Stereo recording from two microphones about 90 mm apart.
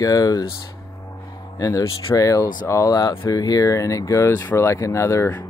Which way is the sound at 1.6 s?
35° left (ahead or behind).